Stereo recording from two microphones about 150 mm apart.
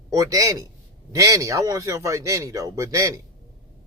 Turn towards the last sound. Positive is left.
turn(degrees=-20)  # may be behind; listen again after turning